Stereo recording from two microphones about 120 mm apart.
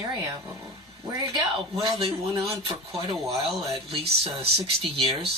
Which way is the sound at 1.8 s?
50° right (ahead or behind).